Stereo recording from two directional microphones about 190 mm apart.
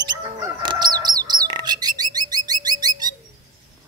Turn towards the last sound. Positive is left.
turn(degrees=-20)  # may be behind; listen again after turning